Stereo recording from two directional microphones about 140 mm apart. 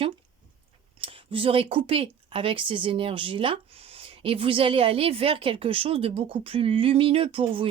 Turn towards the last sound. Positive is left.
turn(degrees=-40)  # may be behind; listen again after turning